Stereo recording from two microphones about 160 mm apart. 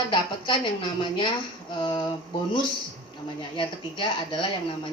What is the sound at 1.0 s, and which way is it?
Speech, 30° left (ahead or behind).